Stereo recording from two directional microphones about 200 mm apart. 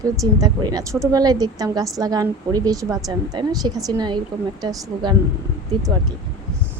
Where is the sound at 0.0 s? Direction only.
15° right (ahead or behind).